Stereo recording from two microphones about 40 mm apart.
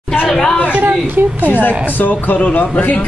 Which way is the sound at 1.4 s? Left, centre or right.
Left.